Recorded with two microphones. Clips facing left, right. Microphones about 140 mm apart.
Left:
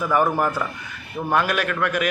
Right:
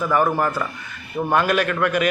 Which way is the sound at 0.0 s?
10° left (ahead or behind).